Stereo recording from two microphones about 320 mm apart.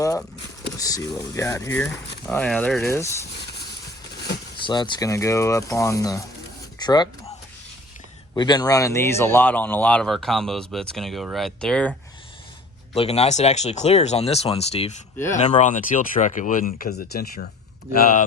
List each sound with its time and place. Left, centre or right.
0.0 s speech: centre
4.6 s speech: centre
6.7 s a sound: centre
8.4 s speech: centre
12.9 s speech: centre